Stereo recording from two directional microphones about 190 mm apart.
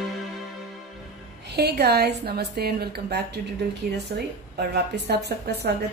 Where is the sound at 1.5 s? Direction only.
60° right (ahead or behind).